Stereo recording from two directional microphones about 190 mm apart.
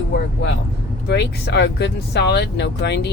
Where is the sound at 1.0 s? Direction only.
60° left (ahead or behind).